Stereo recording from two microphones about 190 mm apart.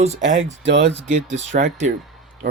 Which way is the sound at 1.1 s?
40° right (ahead or behind).